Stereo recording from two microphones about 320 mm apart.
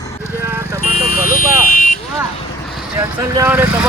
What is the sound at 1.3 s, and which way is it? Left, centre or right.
Vehicle, left.